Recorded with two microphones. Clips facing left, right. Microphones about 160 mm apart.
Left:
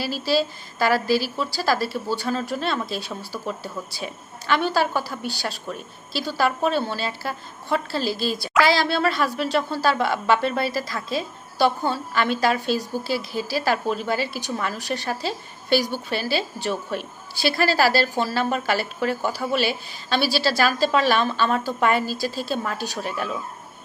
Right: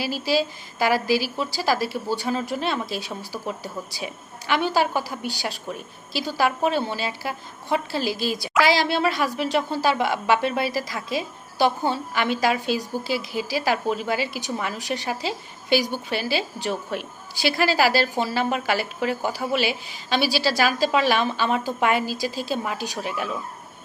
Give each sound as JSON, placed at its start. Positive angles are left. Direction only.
{"t": 0.0, "sound": "a woman's voice", "side_deg": -15}